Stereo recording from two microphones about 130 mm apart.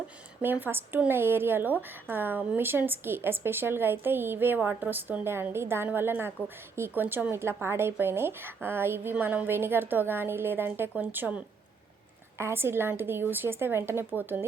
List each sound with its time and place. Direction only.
0.4 s a woman's voice: 15° right (ahead or behind)